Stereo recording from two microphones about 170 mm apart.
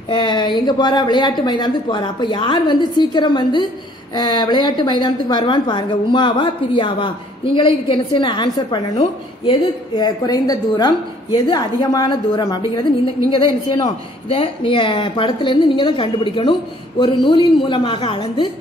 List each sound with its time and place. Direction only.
0.1 s a woman's voice: 25° left (ahead or behind)